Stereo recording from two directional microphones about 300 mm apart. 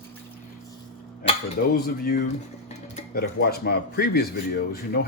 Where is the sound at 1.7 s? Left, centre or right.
Left.